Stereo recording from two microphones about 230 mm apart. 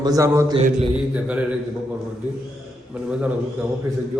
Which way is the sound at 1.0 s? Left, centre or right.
Centre.